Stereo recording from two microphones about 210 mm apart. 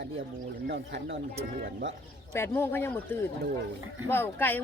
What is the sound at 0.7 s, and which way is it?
Speech, 50° right (ahead or behind).